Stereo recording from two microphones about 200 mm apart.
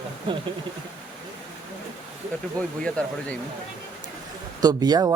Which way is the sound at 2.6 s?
5° left (ahead or behind).